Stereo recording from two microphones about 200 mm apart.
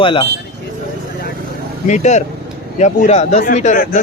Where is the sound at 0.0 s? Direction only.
25° left (ahead or behind).